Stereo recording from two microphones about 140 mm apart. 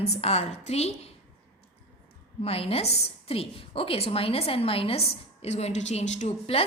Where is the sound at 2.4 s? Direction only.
45° left (ahead or behind).